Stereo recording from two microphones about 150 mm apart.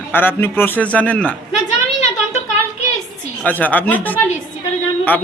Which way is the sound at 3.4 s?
10° left (ahead or behind).